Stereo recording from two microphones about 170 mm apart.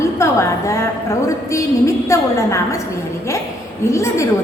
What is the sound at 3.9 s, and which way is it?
Speech, 15° left (ahead or behind).